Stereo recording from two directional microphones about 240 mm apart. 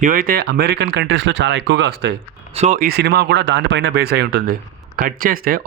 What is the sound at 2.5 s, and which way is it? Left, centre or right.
Speech, right.